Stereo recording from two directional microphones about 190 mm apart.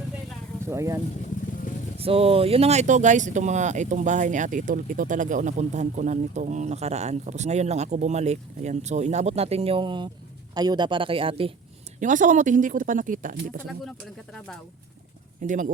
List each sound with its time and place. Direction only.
0.6 s speech: 15° right (ahead or behind)
2.0 s speech: 30° right (ahead or behind)
11.9 s speech: 40° right (ahead or behind)
14.3 s speech: 5° left (ahead or behind)
15.4 s speech: 40° right (ahead or behind)